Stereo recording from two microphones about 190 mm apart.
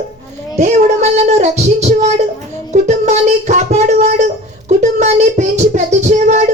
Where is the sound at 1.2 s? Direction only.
35° right (ahead or behind).